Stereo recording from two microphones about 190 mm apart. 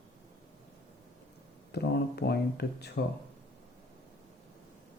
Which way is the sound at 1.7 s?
60° left (ahead or behind).